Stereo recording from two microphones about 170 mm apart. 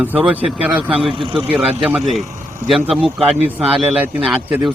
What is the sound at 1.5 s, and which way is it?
Speech, 10° right (ahead or behind).